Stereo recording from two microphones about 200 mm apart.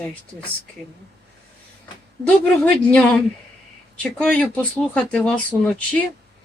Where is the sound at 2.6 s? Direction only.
5° left (ahead or behind).